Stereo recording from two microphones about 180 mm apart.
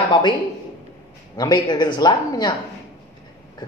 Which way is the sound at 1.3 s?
25° left (ahead or behind).